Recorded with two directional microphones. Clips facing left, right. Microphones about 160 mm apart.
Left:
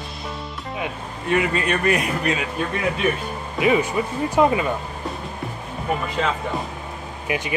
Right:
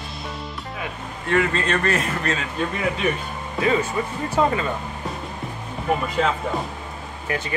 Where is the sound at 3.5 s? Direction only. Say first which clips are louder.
Left 2 dB; 15° left (ahead or behind).